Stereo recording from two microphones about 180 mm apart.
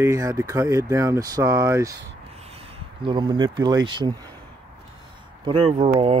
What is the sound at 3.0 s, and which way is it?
Speech, 25° right (ahead or behind).